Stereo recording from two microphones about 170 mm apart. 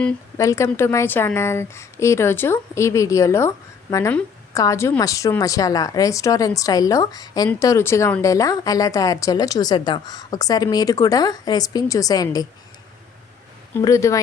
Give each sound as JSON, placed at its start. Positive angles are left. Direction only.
{"t": 0.3, "sound": "a woman's voice", "side_deg": 20}
{"t": 13.7, "sound": "a woman's voice", "side_deg": 15}